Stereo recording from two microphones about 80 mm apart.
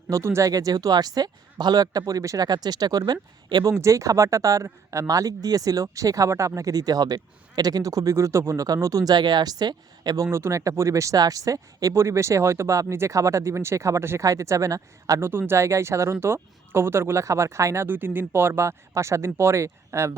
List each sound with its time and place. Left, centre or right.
0.1 s speech: right
3.8 s speech: right
9.1 s speech: right
10.3 s speech: right
15.3 s speech: right
17.8 s speech: right